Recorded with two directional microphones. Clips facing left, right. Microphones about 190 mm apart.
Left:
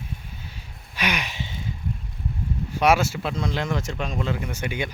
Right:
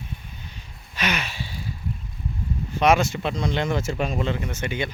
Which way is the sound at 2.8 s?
10° left (ahead or behind).